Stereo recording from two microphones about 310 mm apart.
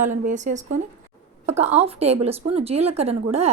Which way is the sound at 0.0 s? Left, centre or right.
Right.